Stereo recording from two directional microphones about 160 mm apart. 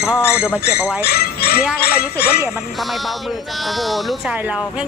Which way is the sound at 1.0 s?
75° left (ahead or behind).